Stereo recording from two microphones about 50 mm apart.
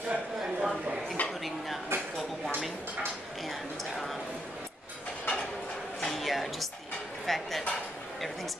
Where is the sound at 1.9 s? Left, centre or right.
Right.